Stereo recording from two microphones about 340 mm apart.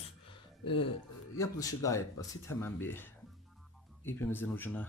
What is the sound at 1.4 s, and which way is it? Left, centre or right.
Speech, centre.